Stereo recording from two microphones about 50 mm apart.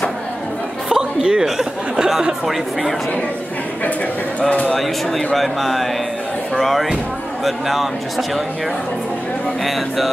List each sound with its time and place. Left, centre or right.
0.8 s a sound: centre
1.4 s speech: centre
4.4 s speech: left
4.6 s speech: centre